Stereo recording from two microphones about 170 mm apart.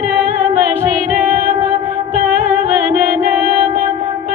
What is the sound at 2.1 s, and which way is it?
Music, 55° right (ahead or behind).